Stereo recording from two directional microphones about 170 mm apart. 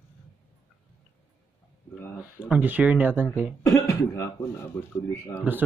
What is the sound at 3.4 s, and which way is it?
Speech, 15° left (ahead or behind).